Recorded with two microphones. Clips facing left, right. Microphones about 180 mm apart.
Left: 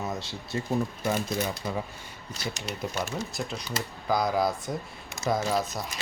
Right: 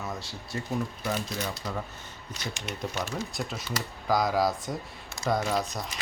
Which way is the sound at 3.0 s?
Centre (ahead or behind).